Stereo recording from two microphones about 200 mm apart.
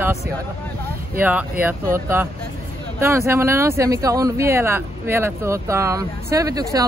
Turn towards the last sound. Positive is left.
turn(degrees=-15)  # may be behind; listen again after turning